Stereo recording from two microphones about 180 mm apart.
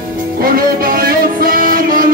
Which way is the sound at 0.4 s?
55° right (ahead or behind).